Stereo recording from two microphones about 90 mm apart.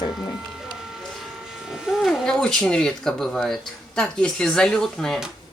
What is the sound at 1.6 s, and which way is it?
Speech, 5° right (ahead or behind).